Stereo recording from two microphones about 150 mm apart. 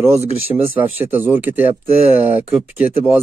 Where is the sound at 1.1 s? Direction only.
15° right (ahead or behind).